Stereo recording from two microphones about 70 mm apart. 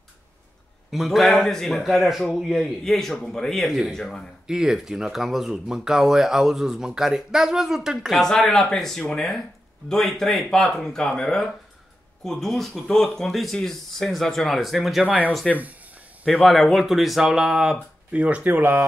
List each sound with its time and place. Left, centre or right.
0.9 s speech: centre
4.5 s speech: centre
8.2 s speech: centre
18.1 s speech: centre